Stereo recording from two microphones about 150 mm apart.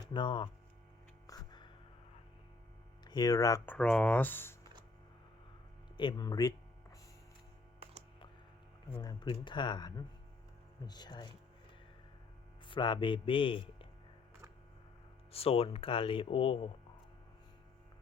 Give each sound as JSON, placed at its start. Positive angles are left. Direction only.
{"t": 0.0, "sound": "hum", "side_deg": 30}
{"t": 1.3, "sound": "music", "side_deg": 30}
{"t": 3.1, "sound": "speech", "side_deg": 25}
{"t": 3.7, "sound": "speech", "side_deg": 5}
{"t": 6.0, "sound": "speech", "side_deg": 30}
{"t": 9.0, "sound": "speech", "side_deg": 25}
{"t": 12.6, "sound": "speech", "side_deg": 30}
{"t": 15.3, "sound": "speech", "side_deg": 40}